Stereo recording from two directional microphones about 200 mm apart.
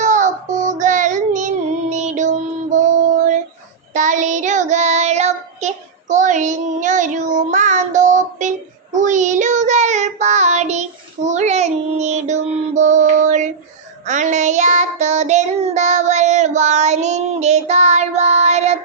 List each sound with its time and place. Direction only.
0.0 s child singing: 40° right (ahead or behind)